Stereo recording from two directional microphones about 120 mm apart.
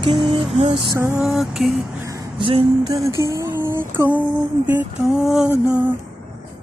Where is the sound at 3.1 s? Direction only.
25° right (ahead or behind).